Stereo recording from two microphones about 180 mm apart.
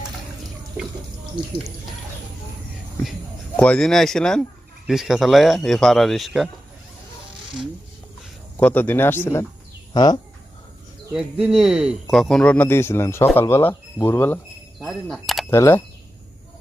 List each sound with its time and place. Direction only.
0.8 s speech: 5° right (ahead or behind)
3.6 s a man's voice: 5° left (ahead or behind)
8.5 s speech: 10° left (ahead or behind)
11.1 s speech: 5° right (ahead or behind); by 14.3 s 10° left (ahead or behind)
14.8 s speech: centre (ahead or behind)
15.4 s speech: 15° left (ahead or behind)